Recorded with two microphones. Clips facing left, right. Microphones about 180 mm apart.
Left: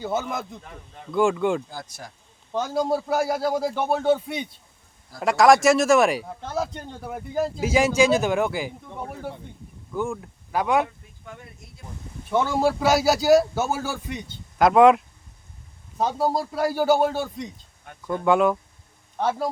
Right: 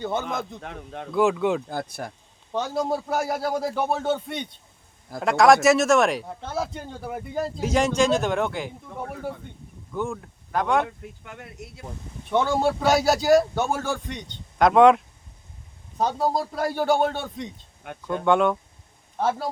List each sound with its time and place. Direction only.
0.0 s speech: 5° left (ahead or behind)
0.6 s a man's voice: 80° right
1.1 s speech: centre (ahead or behind)
1.7 s speech: 60° right (ahead or behind)
2.5 s speech: centre (ahead or behind)
11.3 s speech: 75° right (ahead or behind)
12.3 s speech: centre (ahead or behind)